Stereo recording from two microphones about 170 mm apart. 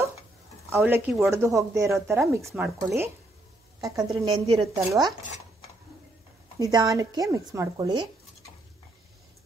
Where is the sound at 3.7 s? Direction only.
20° right (ahead or behind).